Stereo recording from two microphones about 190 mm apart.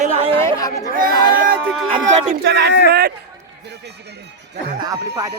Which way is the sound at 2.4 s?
60° right (ahead or behind).